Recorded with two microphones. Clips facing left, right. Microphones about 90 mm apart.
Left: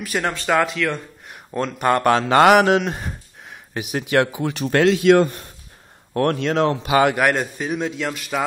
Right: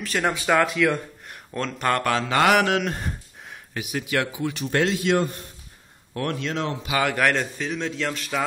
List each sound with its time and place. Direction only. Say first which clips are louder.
0.2 s speech: even; 10° right (ahead or behind)
0.5 s speech: even; centre (ahead or behind)
1.3 s speech: left 5 dB; 15° left (ahead or behind)
2.0 s mantra: left 7 dB; 45° left (ahead or behind)
2.4 s speech: left 5 dB; 25° left (ahead or behind)
2.9 s a sound: left 1 dB; 5° left (ahead or behind)
3.9 s speech: left 7 dB; 35° left (ahead or behind)
4.3 s mantra: left 3 dB; 50° left (ahead or behind)
4.6 s a man's voice: left 7 dB; 70° left (ahead or behind)
6.1 s speech: left 8 dB; 55° left (ahead or behind)
7.1 s a man's voice: left 3 dB; 10° left (ahead or behind)